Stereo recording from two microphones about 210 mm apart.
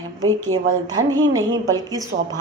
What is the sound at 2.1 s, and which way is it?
Speech, 45° right (ahead or behind).